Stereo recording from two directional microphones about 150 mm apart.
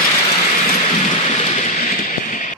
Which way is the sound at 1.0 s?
50° left (ahead or behind).